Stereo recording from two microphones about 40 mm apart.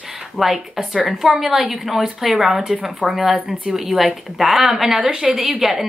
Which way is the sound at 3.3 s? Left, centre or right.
Right.